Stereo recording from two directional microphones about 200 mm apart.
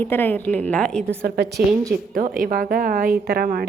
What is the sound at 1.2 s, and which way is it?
A woman's voice, 55° right (ahead or behind).